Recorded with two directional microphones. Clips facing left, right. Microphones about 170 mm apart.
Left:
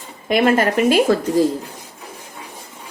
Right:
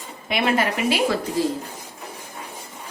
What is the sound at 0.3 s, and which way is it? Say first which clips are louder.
Speech: left 6 dB; 45° left (ahead or behind).